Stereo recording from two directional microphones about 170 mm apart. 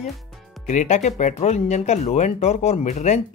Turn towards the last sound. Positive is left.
turn(degrees=40)  # may be behind; listen again after turning